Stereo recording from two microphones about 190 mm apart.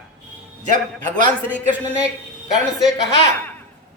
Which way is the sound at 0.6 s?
45° right (ahead or behind).